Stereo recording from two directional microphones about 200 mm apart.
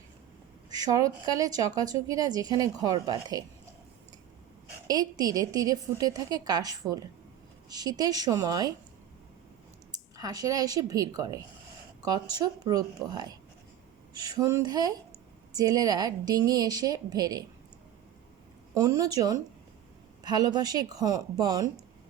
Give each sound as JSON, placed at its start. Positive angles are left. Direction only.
{"t": 0.8, "sound": "a woman's voice", "side_deg": -15}
{"t": 4.9, "sound": "a woman's voice", "side_deg": -20}
{"t": 10.2, "sound": "a woman's voice", "side_deg": -20}
{"t": 18.7, "sound": "a woman's voice", "side_deg": -15}